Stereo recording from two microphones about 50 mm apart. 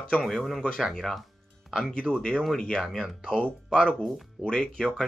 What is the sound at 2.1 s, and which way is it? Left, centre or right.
Speech, left.